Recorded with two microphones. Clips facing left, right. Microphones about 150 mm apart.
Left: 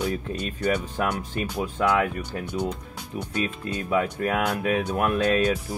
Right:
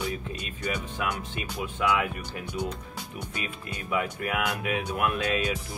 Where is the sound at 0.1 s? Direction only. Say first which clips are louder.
Left 6 dB; 40° left (ahead or behind).